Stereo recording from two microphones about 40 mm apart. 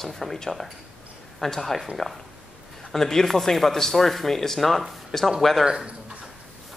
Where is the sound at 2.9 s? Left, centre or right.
Centre.